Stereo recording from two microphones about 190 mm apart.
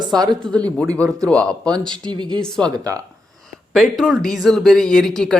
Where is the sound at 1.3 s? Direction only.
5° left (ahead or behind).